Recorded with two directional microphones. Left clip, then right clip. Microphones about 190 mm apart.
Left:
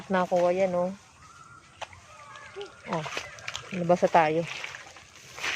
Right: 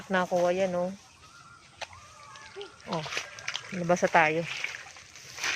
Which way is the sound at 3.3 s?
35° left (ahead or behind).